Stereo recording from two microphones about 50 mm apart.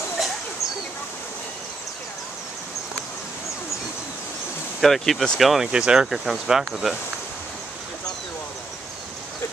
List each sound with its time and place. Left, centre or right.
0.2 s a sound: centre
4.7 s speech: centre
5.7 s speech: centre
6.0 s speech: centre